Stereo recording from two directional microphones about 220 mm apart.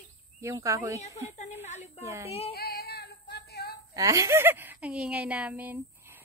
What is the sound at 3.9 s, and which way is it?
A woman's voice, 15° right (ahead or behind).